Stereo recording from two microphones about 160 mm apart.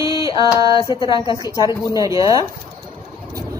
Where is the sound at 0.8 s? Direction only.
30° left (ahead or behind).